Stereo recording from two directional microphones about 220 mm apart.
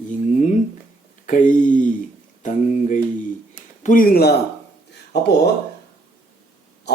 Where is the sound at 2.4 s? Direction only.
35° left (ahead or behind).